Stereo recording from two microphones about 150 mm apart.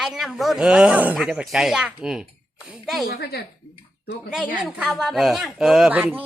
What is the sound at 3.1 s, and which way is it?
Speech, 90° left.